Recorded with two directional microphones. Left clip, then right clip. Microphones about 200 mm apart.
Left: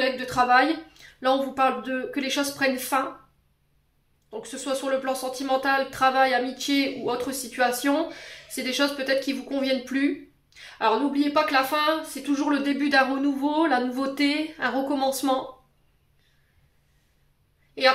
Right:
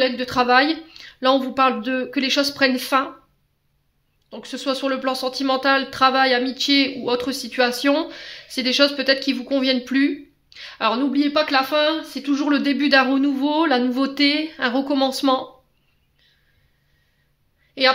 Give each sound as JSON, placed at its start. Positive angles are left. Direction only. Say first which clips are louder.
{"t": 0.0, "sound": "speech", "louder": "right 4 dB", "side_deg": -50}
{"t": 4.3, "sound": "speech", "louder": "right 4 dB", "side_deg": -45}